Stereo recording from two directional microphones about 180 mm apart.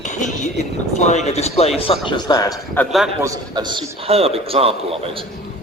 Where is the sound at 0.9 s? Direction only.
40° left (ahead or behind); by 2.6 s 20° left (ahead or behind).